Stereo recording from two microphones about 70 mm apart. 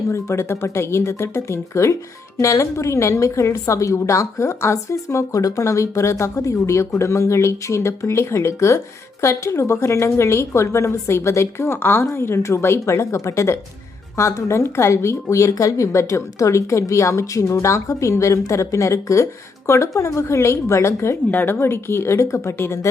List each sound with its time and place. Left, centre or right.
0.1 s a woman's voice: left
21.2 s a woman's voice: left